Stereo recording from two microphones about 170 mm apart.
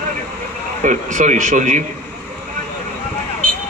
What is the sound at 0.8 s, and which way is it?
Speech, 45° right (ahead or behind).